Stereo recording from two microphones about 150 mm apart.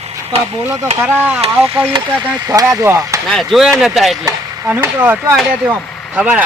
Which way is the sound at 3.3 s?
Centre (ahead or behind).